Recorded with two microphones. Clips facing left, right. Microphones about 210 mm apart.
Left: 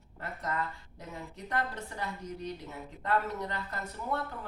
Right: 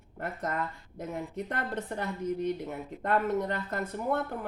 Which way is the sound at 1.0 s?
50° right (ahead or behind).